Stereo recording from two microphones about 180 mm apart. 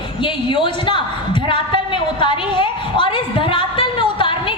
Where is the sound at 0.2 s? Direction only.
25° left (ahead or behind).